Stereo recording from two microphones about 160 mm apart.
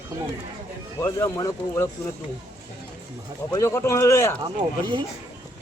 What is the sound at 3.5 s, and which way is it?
Speech, 15° left (ahead or behind).